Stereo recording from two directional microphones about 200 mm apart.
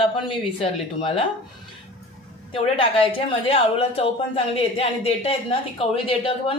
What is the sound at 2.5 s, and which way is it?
A woman's voice, 25° left (ahead or behind).